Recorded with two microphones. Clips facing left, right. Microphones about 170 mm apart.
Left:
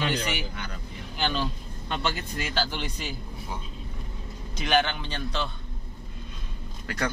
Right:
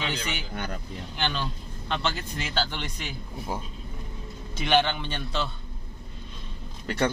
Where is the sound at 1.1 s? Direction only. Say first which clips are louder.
Left 2 dB; 5° left (ahead or behind).